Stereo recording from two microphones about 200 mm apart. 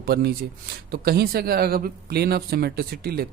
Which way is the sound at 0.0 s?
50° right (ahead or behind).